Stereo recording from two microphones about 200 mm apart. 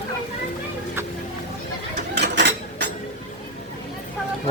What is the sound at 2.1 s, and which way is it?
Mechanisms, 60° right (ahead or behind).